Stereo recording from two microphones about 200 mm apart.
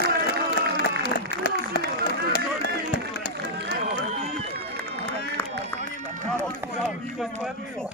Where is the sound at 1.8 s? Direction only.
55° right (ahead or behind).